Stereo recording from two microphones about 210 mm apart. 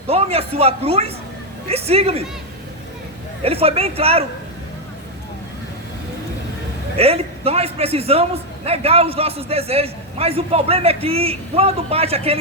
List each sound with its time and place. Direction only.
0.1 s a man's voice: 30° right (ahead or behind)
3.4 s a man's voice: 30° right (ahead or behind)
6.9 s a man's voice: 30° right (ahead or behind)